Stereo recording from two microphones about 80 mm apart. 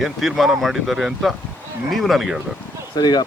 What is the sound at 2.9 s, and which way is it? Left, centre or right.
Speech, left.